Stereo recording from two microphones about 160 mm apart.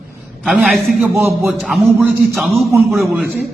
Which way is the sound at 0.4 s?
Centre (ahead or behind).